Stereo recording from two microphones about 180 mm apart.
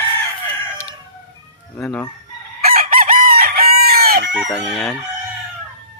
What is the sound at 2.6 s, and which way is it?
Chicken, 55° right (ahead or behind).